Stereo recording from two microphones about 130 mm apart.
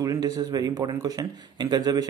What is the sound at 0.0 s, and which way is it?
A man's voice, 30° right (ahead or behind).